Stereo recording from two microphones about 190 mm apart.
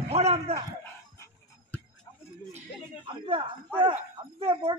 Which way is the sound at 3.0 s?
25° right (ahead or behind).